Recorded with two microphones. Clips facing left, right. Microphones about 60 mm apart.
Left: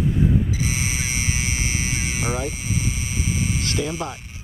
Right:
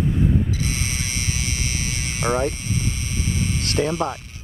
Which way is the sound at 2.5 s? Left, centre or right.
Centre.